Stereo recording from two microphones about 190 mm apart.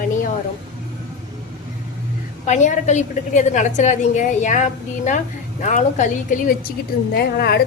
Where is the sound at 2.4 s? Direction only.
40° left (ahead or behind).